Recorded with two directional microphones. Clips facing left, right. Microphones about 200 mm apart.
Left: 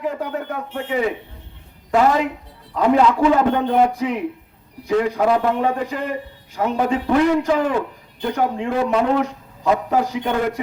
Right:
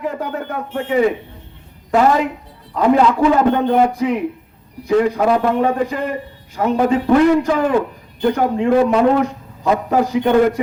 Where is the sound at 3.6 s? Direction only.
50° right (ahead or behind).